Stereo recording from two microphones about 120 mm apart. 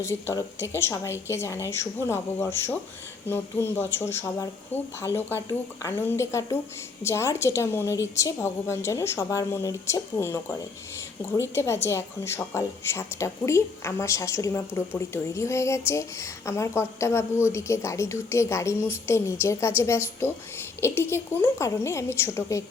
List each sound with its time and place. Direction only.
0.0 s a woman's voice: 20° left (ahead or behind)